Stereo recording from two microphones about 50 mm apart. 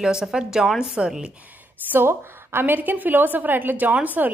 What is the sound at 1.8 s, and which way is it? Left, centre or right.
A woman's voice, right.